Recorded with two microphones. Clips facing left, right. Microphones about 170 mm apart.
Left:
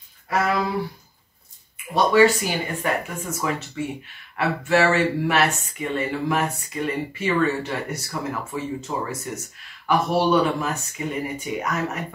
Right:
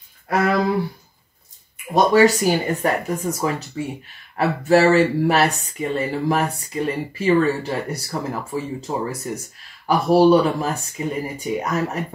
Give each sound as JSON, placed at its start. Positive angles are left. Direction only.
{"t": 0.3, "sound": "speech", "side_deg": -50}
{"t": 2.0, "sound": "speech", "side_deg": -40}